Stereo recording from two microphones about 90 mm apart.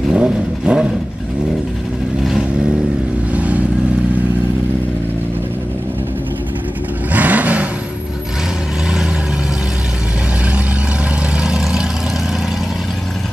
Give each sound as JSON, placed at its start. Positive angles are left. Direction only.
{"t": 0.1, "sound": "vehicle", "side_deg": -10}
{"t": 3.3, "sound": "vehicle", "side_deg": -15}
{"t": 7.1, "sound": "vehicle", "side_deg": -15}
{"t": 11.4, "sound": "vehicle", "side_deg": -10}